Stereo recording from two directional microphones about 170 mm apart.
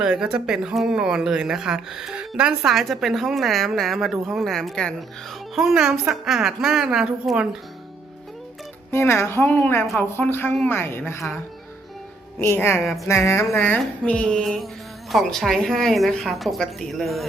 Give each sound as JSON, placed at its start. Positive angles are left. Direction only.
{"t": 0.0, "sound": "speech", "side_deg": -5}
{"t": 8.9, "sound": "a woman's voice", "side_deg": 15}
{"t": 12.4, "sound": "a woman's voice", "side_deg": 15}